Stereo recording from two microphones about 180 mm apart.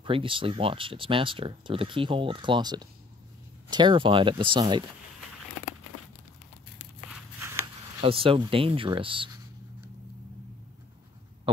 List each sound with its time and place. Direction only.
0.0 s speech: 30° right (ahead or behind)
8.0 s speech: 30° right (ahead or behind)
11.5 s hum: 25° right (ahead or behind)